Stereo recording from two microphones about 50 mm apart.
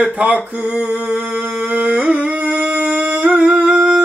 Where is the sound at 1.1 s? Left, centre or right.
Right.